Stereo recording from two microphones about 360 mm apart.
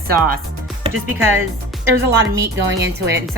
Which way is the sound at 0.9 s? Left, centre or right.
Right.